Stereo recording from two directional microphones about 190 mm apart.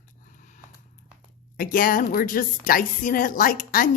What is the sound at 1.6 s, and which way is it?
A woman's voice, 45° left (ahead or behind).